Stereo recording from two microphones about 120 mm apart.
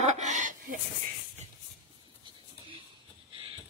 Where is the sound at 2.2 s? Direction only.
45° right (ahead or behind).